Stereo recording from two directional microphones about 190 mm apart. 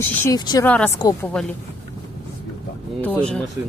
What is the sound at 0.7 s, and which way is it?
Speech, 10° left (ahead or behind).